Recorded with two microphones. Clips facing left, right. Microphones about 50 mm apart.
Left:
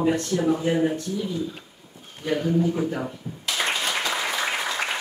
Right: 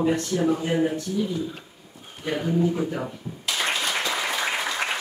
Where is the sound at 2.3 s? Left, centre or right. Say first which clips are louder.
Left 1 dB; centre.